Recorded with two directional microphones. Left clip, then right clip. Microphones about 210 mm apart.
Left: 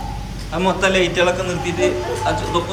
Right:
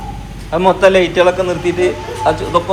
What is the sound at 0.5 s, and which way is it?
A man's voice, 5° left (ahead or behind).